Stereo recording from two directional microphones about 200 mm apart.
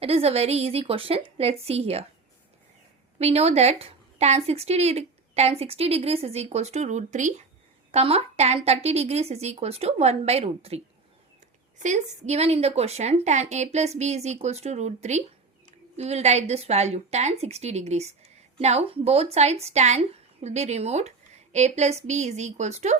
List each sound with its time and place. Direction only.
0.0 s a woman's voice: 30° right (ahead or behind)
3.2 s a woman's voice: 30° right (ahead or behind)